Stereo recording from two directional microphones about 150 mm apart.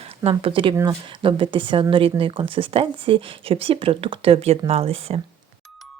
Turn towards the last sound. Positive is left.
turn(degrees=-40)  # may be behind; listen again after turning